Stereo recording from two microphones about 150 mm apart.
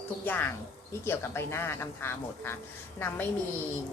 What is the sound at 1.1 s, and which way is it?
A woman's voice, 15° left (ahead or behind).